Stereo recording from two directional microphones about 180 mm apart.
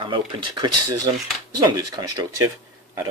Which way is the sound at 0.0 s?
25° right (ahead or behind).